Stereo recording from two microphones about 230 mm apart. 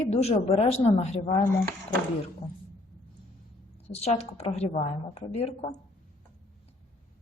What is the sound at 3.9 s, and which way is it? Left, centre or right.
A woman's voice, left.